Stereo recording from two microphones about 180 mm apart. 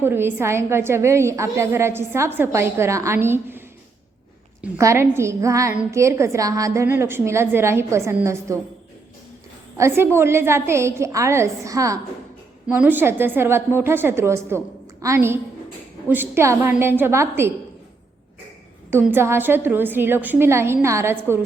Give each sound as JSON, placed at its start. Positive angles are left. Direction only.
{"t": 0.0, "sound": "a woman's voice", "side_deg": -10}
{"t": 4.8, "sound": "a woman's voice", "side_deg": -15}
{"t": 9.7, "sound": "a woman's voice", "side_deg": -15}
{"t": 18.9, "sound": "a woman's voice", "side_deg": -15}